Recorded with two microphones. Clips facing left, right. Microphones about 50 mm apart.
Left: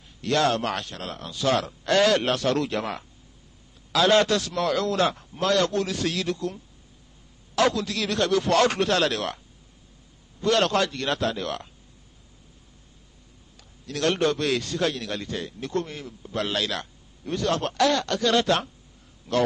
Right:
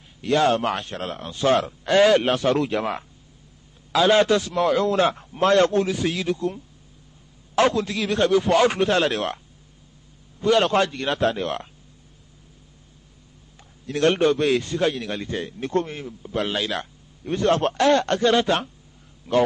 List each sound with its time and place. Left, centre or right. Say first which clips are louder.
0.2 s speech: right 3 dB; centre
0.8 s a man's voice: right 5 dB; right
1.9 s a man's voice: right 4 dB; centre
5.9 s speech: right 3 dB; centre
7.5 s a man's voice: right 3 dB; right
10.4 s a man's voice: right 3 dB; centre
13.6 s a sound: right 6 dB; right
14.2 s a man's voice: right 4 dB; centre
16.1 s a man's voice: right 3 dB; centre; by 18.3 s right
18.3 s a man's voice: right 2 dB; centre